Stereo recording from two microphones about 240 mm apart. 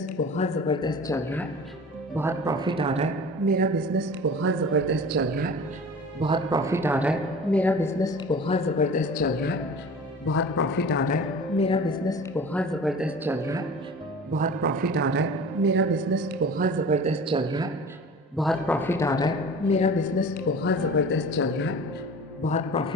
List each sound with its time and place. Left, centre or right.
0.0 s speech: left; by 1.5 s centre
2.1 s speech: centre; by 4.0 s right
4.4 s speech: right
6.2 s speech: centre; by 9.6 s left
10.2 s speech: left; by 13.7 s centre
14.3 s a man's voice: right; by 17.7 s centre
18.3 s speech: centre
19.7 s speech: left
22.4 s speech: left